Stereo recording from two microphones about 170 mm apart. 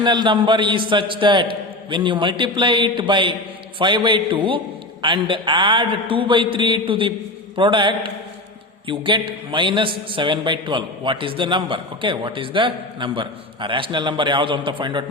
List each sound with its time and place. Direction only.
0.0 s a man's voice: 25° right (ahead or behind)